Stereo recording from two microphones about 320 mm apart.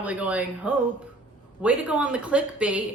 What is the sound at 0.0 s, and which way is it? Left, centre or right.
A woman's voice, centre.